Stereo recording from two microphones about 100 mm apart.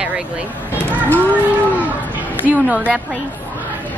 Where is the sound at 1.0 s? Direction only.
15° left (ahead or behind).